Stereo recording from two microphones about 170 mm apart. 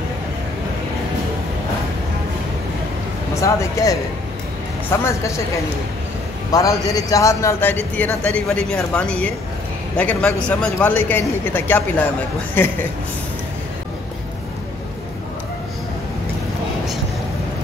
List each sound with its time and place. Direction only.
3.3 s a man's voice: 20° left (ahead or behind)
6.5 s a man's voice: 20° left (ahead or behind)